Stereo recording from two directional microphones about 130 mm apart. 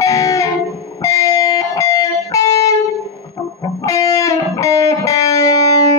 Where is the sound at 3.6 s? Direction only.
25° left (ahead or behind).